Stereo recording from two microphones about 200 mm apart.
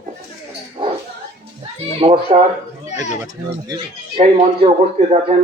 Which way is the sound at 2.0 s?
30° right (ahead or behind).